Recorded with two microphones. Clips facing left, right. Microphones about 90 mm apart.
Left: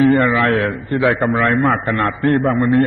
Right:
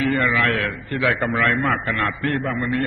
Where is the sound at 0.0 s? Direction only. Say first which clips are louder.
Left 7 dB; 40° left (ahead or behind).